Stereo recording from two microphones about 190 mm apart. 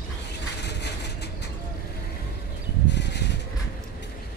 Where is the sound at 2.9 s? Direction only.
65° left (ahead or behind).